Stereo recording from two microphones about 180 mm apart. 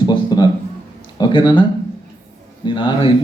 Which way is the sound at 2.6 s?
25° left (ahead or behind).